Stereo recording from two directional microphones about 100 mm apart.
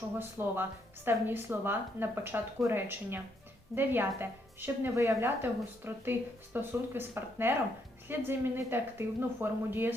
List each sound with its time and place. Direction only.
0.2 s a woman's voice: 20° right (ahead or behind)